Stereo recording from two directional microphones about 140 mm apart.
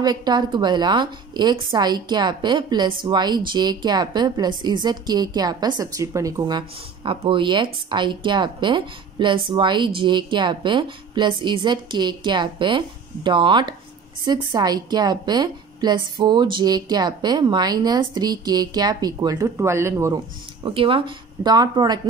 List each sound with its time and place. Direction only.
0.0 s a woman's voice: 30° right (ahead or behind)
20.6 s a woman's voice: 40° right (ahead or behind)